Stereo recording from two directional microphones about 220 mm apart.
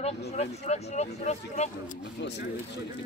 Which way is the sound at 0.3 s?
30° left (ahead or behind).